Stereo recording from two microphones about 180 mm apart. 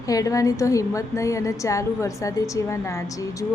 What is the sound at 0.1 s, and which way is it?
A woman's voice, 20° left (ahead or behind).